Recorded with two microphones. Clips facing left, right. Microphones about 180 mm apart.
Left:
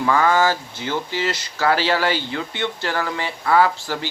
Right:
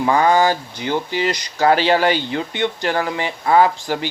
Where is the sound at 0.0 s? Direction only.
20° right (ahead or behind).